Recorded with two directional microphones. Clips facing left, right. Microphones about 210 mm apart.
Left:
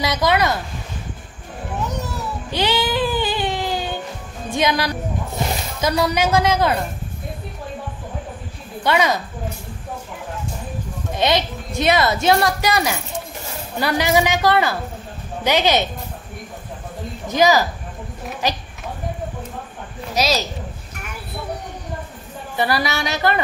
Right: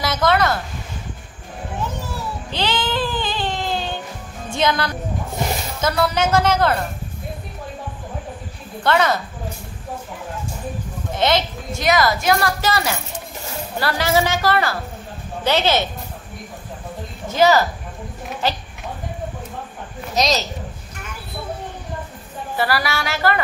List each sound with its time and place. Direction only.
0.0 s a woman's voice: 15° left (ahead or behind)
2.5 s a sound: 10° left (ahead or behind)
4.5 s a woman's voice: 15° left (ahead or behind)
8.8 s a woman's voice: 15° left (ahead or behind)
11.1 s a woman's voice: 15° left (ahead or behind)
17.3 s a woman's voice: 15° left (ahead or behind)
20.2 s a woman's voice: 5° left (ahead or behind)
22.6 s a woman's voice: 20° left (ahead or behind)